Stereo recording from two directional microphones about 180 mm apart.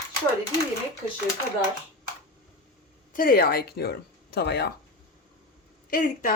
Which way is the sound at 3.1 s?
50° left (ahead or behind).